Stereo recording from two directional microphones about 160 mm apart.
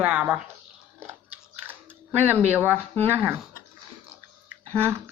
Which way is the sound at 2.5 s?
15° right (ahead or behind).